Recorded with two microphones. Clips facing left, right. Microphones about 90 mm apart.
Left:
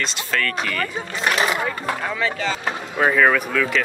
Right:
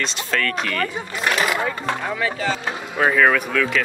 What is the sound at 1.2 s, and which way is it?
Speech, 30° left (ahead or behind).